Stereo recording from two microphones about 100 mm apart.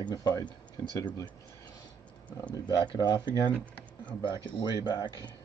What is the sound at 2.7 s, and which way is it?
Speech, 45° left (ahead or behind).